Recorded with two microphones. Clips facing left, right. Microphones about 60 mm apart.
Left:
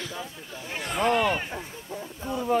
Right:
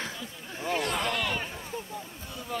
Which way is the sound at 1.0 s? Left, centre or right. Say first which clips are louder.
Left 7 dB; left.